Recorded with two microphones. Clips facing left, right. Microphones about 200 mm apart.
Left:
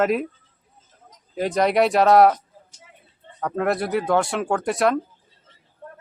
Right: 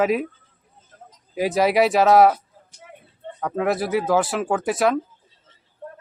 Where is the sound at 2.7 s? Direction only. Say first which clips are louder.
Right 7 dB; 55° right (ahead or behind).